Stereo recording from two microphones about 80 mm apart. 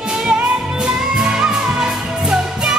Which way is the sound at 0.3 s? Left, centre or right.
Centre.